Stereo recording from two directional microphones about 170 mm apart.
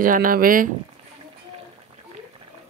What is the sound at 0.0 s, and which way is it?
Speech, 55° right (ahead or behind).